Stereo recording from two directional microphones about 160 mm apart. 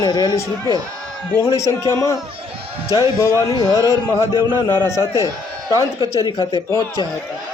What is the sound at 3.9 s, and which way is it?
A man's voice, 25° left (ahead or behind).